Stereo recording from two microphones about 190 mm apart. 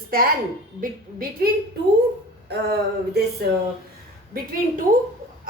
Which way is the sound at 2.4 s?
55° right (ahead or behind).